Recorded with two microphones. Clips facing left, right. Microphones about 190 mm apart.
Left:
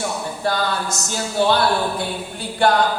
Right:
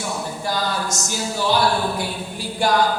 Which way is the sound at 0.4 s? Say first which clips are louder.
Left 3 dB; 60° left (ahead or behind).